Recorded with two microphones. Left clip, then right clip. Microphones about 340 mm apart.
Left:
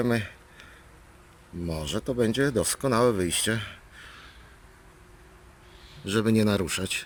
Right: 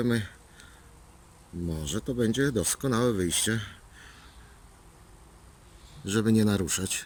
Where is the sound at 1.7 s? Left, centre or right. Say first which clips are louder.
Left 4 dB; centre.